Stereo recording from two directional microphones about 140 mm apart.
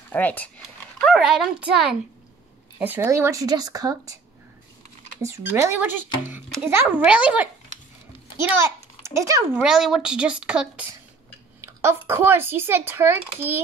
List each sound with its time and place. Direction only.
0.1 s speech: 10° left (ahead or behind)
1.0 s speech: centre (ahead or behind); by 4.2 s 25° right (ahead or behind)
5.2 s a child's voice: 20° right (ahead or behind)
9.6 s speech: 5° right (ahead or behind)
11.6 s speech: 20° right (ahead or behind)